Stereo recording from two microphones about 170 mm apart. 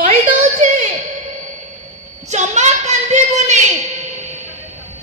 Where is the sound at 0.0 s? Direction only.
50° right (ahead or behind).